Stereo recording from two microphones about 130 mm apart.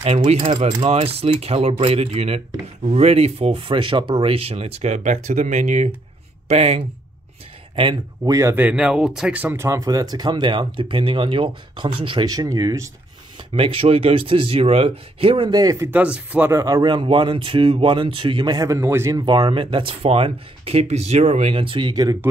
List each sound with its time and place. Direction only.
0.0 s speech: 55° right (ahead or behind)
6.5 s speech: 55° right (ahead or behind)
8.2 s speech: 25° right (ahead or behind)
8.5 s speech: 10° right (ahead or behind); by 12.9 s 25° right (ahead or behind)
13.5 s speech: 45° right (ahead or behind); by 15.9 s 25° right (ahead or behind)
15.9 s speech: 10° right (ahead or behind)
19.2 s speech: 35° right (ahead or behind)